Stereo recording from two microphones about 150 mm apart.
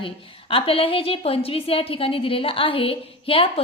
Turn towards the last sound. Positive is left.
turn(degrees=35)  # may be behind; listen again after turning